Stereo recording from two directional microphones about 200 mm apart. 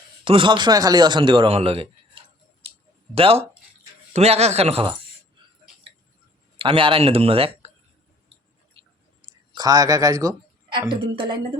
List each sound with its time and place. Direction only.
0.3 s speech: 25° right (ahead or behind)
3.2 s speech: 30° right (ahead or behind)
6.6 s speech: 25° right (ahead or behind)
8.8 s a sound: 25° right (ahead or behind)
9.6 s speech: 20° right (ahead or behind)